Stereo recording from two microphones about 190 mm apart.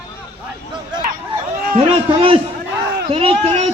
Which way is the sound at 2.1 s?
30° right (ahead or behind).